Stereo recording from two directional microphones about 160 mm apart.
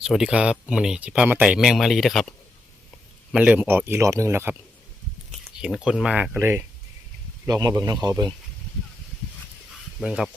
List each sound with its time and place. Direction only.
0.0 s speech: 5° right (ahead or behind)
3.3 s speech: 10° right (ahead or behind)
5.5 s speech: 5° right (ahead or behind); by 8.3 s 20° right (ahead or behind)
10.0 s speech: 5° right (ahead or behind)